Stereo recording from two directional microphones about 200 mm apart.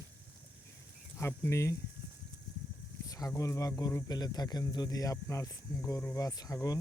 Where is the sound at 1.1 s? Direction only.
10° left (ahead or behind).